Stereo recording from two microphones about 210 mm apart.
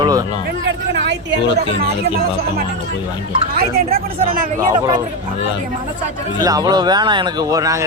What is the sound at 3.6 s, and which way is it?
Speech, 45° right (ahead or behind).